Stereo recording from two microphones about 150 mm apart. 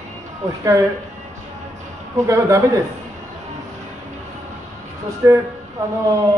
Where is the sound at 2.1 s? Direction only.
20° right (ahead or behind).